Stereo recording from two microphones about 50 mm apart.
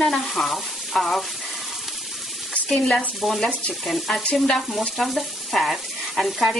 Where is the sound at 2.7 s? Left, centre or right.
Left.